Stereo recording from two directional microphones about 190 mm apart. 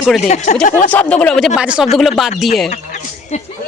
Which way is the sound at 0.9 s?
5° left (ahead or behind).